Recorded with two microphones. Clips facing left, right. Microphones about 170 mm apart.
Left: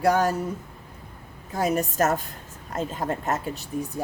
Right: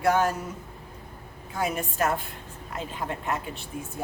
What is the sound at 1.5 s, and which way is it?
Speech, 40° left (ahead or behind).